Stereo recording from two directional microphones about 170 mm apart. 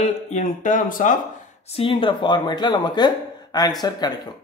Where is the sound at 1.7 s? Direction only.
30° left (ahead or behind).